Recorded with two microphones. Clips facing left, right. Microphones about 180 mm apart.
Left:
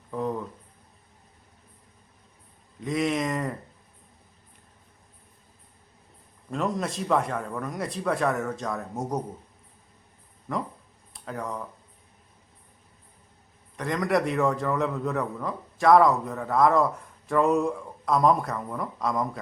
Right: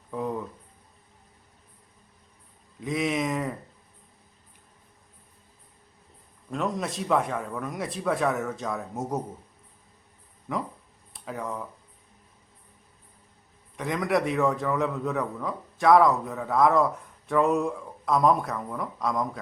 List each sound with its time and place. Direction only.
0.1 s a man's voice: 5° right (ahead or behind)
2.8 s a man's voice: centre (ahead or behind)
6.5 s a man's voice: centre (ahead or behind)
10.5 s a man's voice: centre (ahead or behind)
13.7 s a man's voice: 5° right (ahead or behind)